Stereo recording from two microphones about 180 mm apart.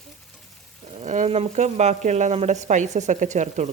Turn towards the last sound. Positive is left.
turn(degrees=-40)  # may be behind; listen again after turning